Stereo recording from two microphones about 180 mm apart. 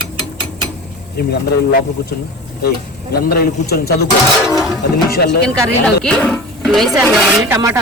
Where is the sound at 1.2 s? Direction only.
60° left (ahead or behind).